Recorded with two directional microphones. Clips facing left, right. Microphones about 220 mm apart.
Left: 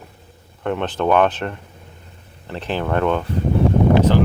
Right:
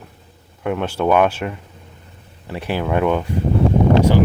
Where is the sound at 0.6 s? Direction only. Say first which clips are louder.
Right 1 dB; 5° right (ahead or behind).